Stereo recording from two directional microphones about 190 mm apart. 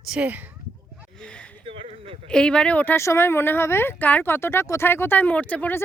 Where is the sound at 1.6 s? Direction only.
30° right (ahead or behind).